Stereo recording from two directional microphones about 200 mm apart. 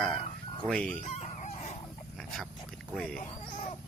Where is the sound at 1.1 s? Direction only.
30° left (ahead or behind).